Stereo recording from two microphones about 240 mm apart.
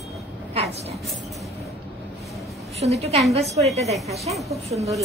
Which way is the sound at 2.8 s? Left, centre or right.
Right.